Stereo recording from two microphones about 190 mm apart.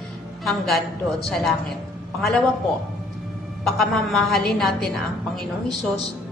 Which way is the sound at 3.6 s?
Centre (ahead or behind).